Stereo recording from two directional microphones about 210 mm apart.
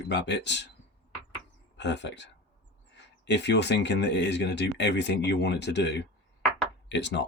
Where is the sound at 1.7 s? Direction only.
55° left (ahead or behind).